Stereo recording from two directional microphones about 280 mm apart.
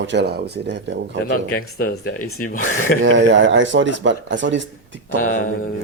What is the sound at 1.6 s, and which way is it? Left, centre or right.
Speech, left.